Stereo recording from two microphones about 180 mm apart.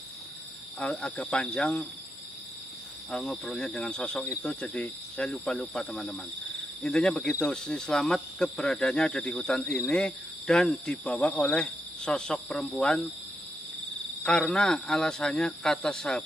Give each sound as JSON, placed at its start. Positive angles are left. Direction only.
{"t": 0.7, "sound": "speech", "side_deg": 5}
{"t": 3.1, "sound": "speech", "side_deg": 0}
{"t": 14.2, "sound": "speech", "side_deg": 5}